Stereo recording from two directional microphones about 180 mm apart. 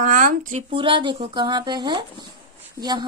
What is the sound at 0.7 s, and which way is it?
A woman's voice, 30° right (ahead or behind).